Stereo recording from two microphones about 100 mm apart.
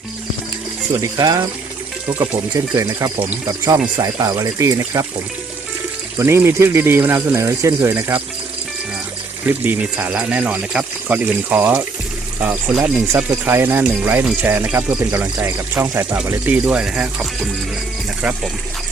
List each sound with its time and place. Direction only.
1.0 s speech: 40° right (ahead or behind)
2.7 s speech: 30° right (ahead or behind)
6.1 s speech: 25° right (ahead or behind)
9.5 s speech: 15° right (ahead or behind)
16.2 s speech: 15° right (ahead or behind)